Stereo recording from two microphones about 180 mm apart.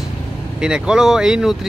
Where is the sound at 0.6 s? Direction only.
5° right (ahead or behind).